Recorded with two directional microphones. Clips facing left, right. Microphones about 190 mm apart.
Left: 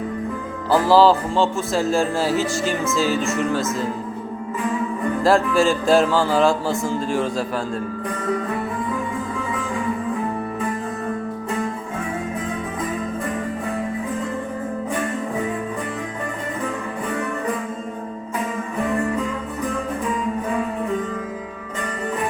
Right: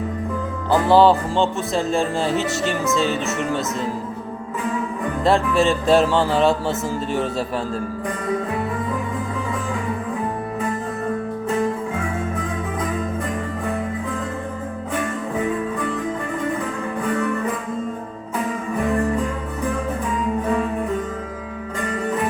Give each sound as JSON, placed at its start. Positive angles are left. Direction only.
{"t": 0.7, "sound": "speech", "side_deg": 0}
{"t": 5.2, "sound": "speech", "side_deg": 0}